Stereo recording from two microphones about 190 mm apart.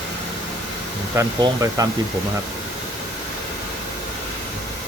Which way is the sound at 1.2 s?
20° right (ahead or behind).